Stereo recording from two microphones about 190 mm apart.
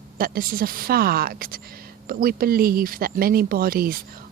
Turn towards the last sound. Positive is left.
turn(degrees=-50)  # may be behind; listen again after turning